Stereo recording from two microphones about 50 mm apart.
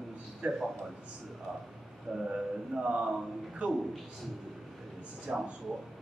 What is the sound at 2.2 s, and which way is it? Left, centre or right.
Chant, centre.